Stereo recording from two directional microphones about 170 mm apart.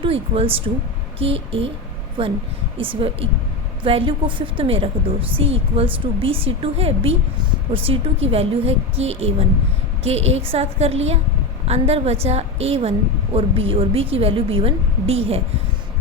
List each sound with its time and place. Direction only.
0.0 s a woman's voice: 35° right (ahead or behind)